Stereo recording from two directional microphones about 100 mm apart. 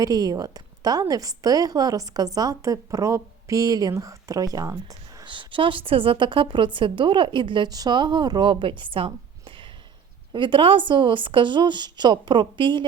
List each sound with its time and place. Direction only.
0.0 s speech: 40° right (ahead or behind)
5.2 s a woman's voice: 55° right (ahead or behind)
7.7 s a woman's voice: 45° right (ahead or behind)
9.0 s a sound: 55° right (ahead or behind)
10.3 s a woman's voice: 55° right (ahead or behind)